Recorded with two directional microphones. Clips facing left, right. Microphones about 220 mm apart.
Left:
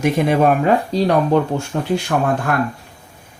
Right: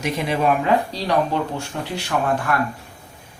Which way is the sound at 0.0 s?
50° left (ahead or behind).